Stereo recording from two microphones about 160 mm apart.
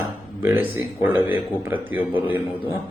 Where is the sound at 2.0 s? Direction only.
30° left (ahead or behind).